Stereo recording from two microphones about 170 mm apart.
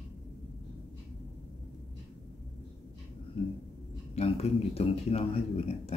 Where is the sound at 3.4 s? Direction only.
35° left (ahead or behind).